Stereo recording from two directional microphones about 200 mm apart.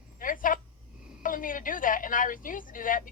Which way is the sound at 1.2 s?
40° left (ahead or behind).